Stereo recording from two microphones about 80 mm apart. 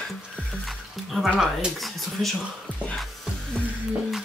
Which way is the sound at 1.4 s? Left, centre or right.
Centre.